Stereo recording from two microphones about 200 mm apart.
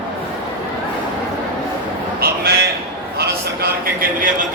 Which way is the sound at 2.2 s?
50° right (ahead or behind).